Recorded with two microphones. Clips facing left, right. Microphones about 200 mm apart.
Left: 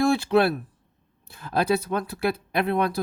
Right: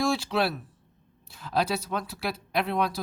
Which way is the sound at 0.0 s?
55° left (ahead or behind).